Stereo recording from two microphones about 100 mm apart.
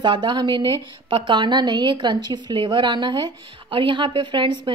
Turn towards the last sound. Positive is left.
turn(degrees=-50)  # may be behind; listen again after turning